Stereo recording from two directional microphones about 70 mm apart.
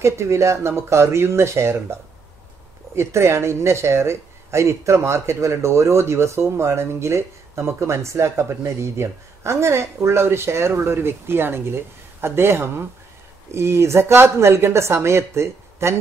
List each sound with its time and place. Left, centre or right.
0.0 s speech: right
3.0 s speech: right